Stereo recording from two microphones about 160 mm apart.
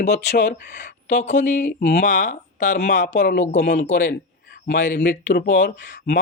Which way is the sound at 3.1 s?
75° left (ahead or behind).